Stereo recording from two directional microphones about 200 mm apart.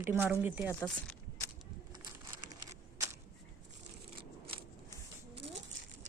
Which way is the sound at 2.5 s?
15° right (ahead or behind).